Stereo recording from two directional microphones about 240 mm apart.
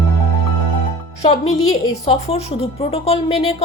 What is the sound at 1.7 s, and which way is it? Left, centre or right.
Speech, left.